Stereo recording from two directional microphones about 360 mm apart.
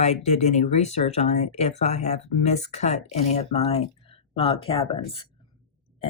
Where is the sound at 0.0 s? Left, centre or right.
Centre.